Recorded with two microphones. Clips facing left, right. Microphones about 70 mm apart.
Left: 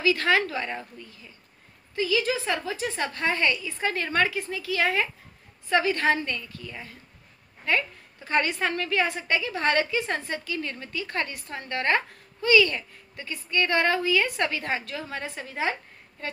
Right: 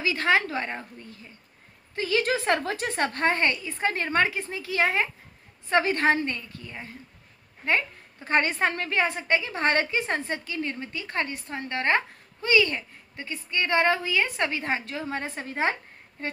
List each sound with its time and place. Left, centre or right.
0.0 s a woman's voice: right
2.0 s a woman's voice: right